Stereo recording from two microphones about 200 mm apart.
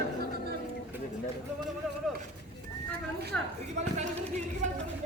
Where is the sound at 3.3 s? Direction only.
5° left (ahead or behind).